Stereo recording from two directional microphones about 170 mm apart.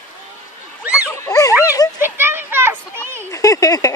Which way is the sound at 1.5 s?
10° right (ahead or behind).